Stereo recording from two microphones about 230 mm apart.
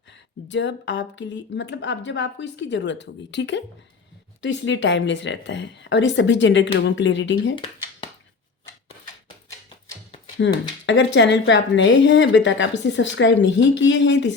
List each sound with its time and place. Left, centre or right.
0.4 s a woman's voice: left
10.4 s a woman's voice: left